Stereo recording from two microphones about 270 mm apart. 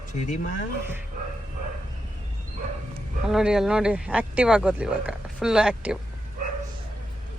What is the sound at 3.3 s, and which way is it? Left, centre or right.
Speech, centre.